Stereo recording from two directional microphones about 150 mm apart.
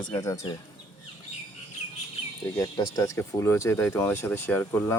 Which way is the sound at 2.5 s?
20° left (ahead or behind).